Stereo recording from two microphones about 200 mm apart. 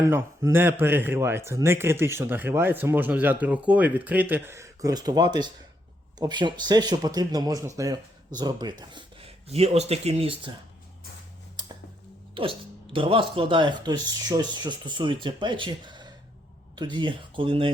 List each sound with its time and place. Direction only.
0.0 s speech: 15° right (ahead or behind)
12.3 s speech: 25° right (ahead or behind)